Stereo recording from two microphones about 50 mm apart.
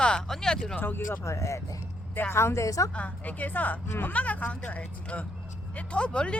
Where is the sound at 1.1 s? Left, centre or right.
Left.